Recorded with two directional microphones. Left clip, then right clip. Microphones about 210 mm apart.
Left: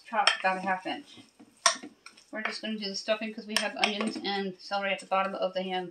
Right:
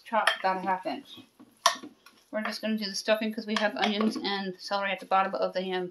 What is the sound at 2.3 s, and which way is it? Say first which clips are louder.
Speech: right 3 dB; 50° right (ahead or behind).